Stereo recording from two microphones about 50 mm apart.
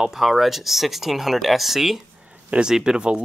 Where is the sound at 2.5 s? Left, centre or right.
Centre.